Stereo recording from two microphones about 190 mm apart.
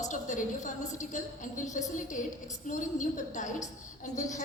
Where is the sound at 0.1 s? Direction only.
40° left (ahead or behind).